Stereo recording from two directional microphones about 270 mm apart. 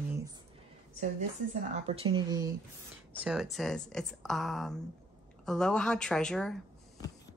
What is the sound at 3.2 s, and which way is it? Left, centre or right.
Speech, centre.